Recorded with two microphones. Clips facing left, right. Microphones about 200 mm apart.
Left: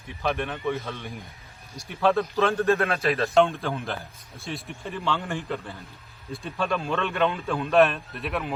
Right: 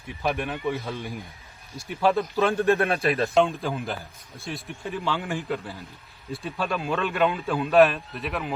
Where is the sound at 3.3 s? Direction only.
Centre (ahead or behind).